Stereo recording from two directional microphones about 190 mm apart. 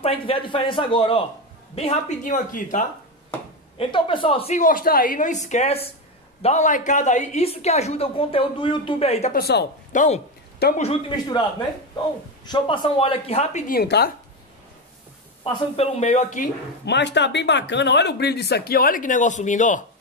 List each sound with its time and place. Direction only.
0.0 s a woman's voice: 30° left (ahead or behind)
3.7 s a woman's voice: 25° left (ahead or behind)
9.3 s speech: 55° left (ahead or behind)
9.9 s a woman's voice: 35° left (ahead or behind)
12.4 s speech: 25° left (ahead or behind)
13.7 s speech: 55° left (ahead or behind)
15.5 s a woman's voice: 30° left (ahead or behind)
16.8 s speech: 65° left (ahead or behind); by 19.8 s 40° left (ahead or behind)